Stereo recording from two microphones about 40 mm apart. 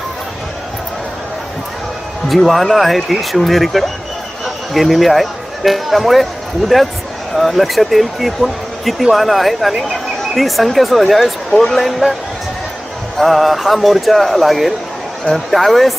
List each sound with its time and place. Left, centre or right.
2.2 s speech: centre
13.1 s speech: centre